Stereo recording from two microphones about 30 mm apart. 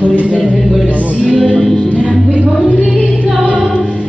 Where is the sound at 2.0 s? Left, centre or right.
Right.